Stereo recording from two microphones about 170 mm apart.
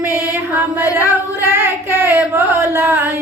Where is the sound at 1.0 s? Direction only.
15° right (ahead or behind).